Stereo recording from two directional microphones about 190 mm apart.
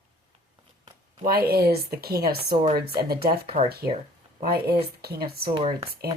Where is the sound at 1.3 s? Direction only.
55° right (ahead or behind).